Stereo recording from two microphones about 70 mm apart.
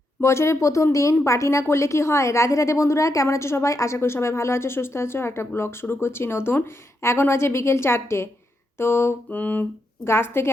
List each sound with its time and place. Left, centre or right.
0.2 s a woman's voice: left
9.3 s a sound: left
10.0 s speech: left